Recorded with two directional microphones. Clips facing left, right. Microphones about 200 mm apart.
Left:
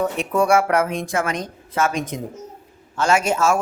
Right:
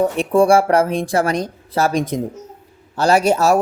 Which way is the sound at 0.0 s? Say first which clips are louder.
Right 6 dB; 30° right (ahead or behind).